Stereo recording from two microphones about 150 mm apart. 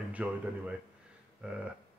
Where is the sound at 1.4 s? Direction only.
5° right (ahead or behind).